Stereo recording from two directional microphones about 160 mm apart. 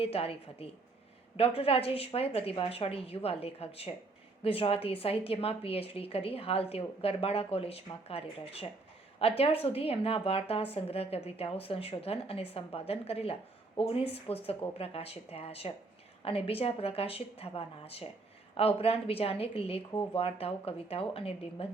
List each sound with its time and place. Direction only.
0.0 s a woman's voice: 35° left (ahead or behind)